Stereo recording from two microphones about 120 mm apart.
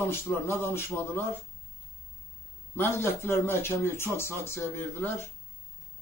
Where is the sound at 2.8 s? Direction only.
20° left (ahead or behind).